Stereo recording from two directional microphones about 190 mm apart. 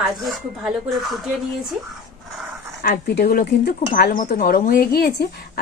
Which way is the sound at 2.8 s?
50° left (ahead or behind).